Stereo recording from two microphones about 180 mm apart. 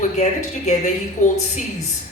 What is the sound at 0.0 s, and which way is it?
A woman's voice, 40° left (ahead or behind).